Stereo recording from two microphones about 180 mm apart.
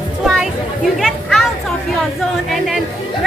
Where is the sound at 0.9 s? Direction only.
Centre (ahead or behind).